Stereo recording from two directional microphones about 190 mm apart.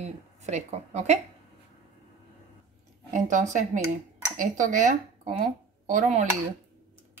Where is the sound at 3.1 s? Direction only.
40° right (ahead or behind).